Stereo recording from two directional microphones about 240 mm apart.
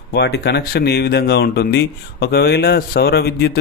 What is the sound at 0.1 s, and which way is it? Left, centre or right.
Speech, left.